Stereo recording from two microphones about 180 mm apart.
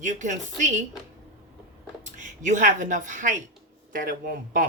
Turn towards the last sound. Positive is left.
turn(degrees=-50)  # may be behind; listen again after turning